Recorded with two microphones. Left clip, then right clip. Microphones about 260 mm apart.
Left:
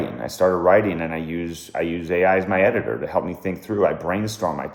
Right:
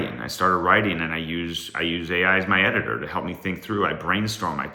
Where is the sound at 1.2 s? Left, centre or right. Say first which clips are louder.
Right 1 dB; centre.